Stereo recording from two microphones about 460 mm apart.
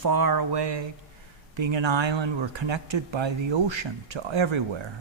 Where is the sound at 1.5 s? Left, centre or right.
Right.